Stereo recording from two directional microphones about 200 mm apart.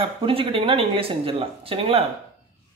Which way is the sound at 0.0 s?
25° right (ahead or behind).